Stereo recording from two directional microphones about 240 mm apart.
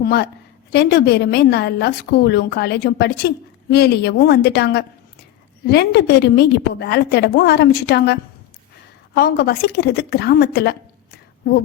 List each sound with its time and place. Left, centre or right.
0.0 s a woman's voice: left